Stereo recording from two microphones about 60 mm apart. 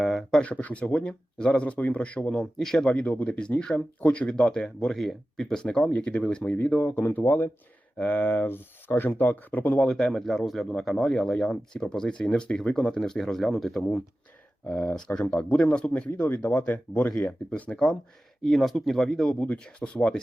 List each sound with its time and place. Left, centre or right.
0.0 s a sound: centre
0.4 s speech: left
9.8 s speech: centre
14.7 s speech: centre
15.4 s speech: left
15.6 s speech: centre
16.4 s speech: left
17.2 s speech: centre
19.4 s speech: centre